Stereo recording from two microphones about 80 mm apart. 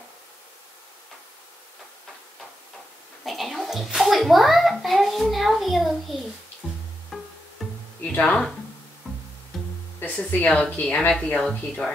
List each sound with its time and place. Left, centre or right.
3.3 s a child's voice: centre
6.6 s music: centre
8.0 s speech: centre
9.9 s speech: centre